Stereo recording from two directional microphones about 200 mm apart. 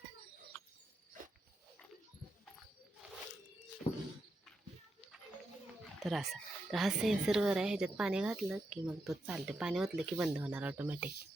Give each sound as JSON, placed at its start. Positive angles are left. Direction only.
{"t": 6.0, "sound": "a woman's voice", "side_deg": 0}